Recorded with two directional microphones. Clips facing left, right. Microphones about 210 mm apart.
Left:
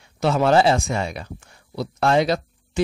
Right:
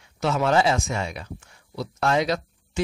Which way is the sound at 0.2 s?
35° left (ahead or behind).